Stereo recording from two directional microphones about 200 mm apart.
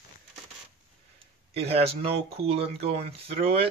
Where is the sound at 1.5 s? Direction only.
30° right (ahead or behind).